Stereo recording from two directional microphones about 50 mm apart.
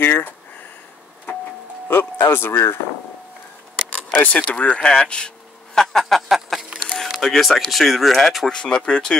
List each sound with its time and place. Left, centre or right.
0.0 s speech: left
1.9 s speech: left
4.2 s speech: left
5.8 s a sound: centre
7.2 s speech: centre
8.5 s speech: centre